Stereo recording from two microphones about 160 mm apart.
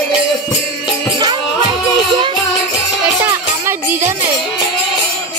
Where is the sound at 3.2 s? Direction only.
15° right (ahead or behind).